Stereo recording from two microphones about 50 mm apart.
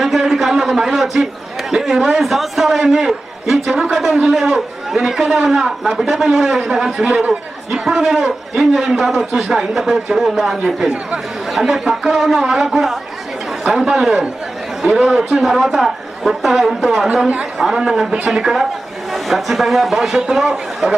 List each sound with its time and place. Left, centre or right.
0.0 s a man's voice: centre